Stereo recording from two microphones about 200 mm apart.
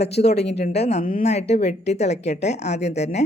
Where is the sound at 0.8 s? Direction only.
35° left (ahead or behind).